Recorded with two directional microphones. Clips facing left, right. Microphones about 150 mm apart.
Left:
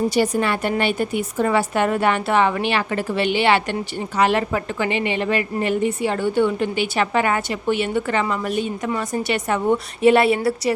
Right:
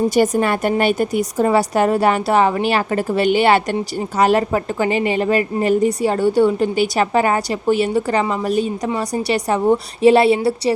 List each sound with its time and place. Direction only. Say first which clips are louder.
0.1 s a woman's voice: right 4 dB; 45° right (ahead or behind); by 10.7 s 30° right (ahead or behind)